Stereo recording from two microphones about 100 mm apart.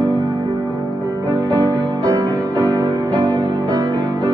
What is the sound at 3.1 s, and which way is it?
Music, 15° left (ahead or behind).